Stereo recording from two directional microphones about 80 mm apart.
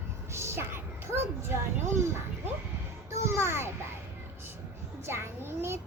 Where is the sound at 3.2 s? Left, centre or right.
Right.